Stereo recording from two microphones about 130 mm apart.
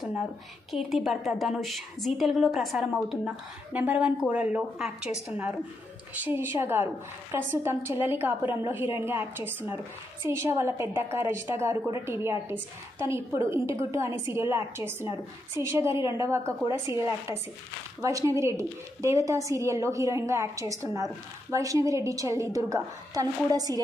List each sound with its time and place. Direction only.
0.7 s a woman's voice: centre (ahead or behind)
6.1 s a woman's voice: 15° right (ahead or behind)